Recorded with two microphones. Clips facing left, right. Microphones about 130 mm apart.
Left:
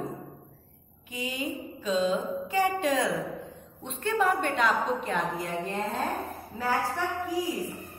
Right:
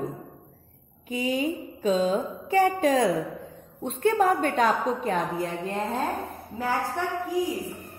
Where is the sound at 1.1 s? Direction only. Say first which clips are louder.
Right 7 dB; 50° right (ahead or behind).